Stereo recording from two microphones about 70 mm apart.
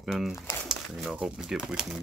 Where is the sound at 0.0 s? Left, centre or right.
Centre.